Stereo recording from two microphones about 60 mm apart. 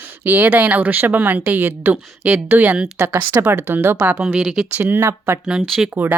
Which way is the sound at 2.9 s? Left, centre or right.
Right.